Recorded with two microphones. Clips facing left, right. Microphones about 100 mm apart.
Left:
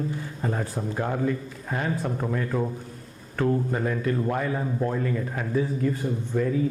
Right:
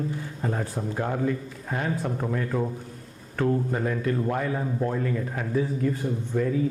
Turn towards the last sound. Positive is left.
turn(degrees=10)  # may be behind; listen again after turning